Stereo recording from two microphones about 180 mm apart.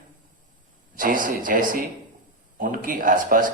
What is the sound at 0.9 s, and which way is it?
Speech, 50° right (ahead or behind).